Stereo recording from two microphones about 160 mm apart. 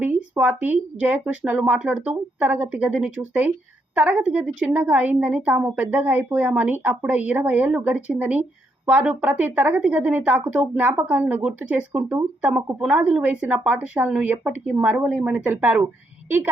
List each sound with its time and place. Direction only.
0.0 s speech: 10° right (ahead or behind)